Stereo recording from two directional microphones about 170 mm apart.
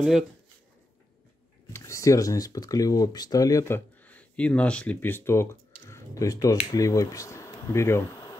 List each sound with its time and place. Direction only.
1.7 s speech: 15° left (ahead or behind)